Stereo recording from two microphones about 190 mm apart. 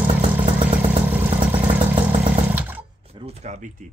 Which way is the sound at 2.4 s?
10° right (ahead or behind).